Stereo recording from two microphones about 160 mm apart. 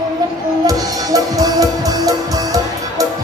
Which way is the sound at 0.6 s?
25° right (ahead or behind).